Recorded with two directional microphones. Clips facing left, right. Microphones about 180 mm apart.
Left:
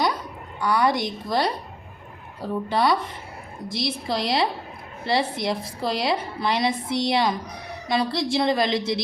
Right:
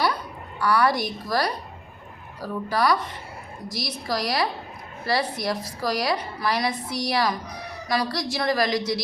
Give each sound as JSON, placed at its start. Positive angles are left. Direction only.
{"t": 0.6, "sound": "a woman's voice", "side_deg": 20}